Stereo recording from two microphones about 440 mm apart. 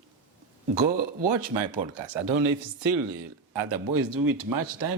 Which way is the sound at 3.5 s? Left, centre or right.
Right.